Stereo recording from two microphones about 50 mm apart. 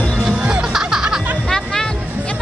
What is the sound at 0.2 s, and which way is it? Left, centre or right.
Music, centre.